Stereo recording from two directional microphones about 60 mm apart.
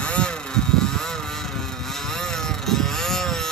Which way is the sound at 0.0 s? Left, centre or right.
Centre.